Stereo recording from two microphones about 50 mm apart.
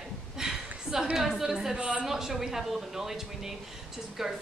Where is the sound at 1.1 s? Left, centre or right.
Centre.